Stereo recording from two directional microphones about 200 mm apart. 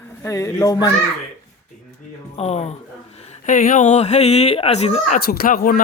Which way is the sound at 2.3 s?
35° left (ahead or behind).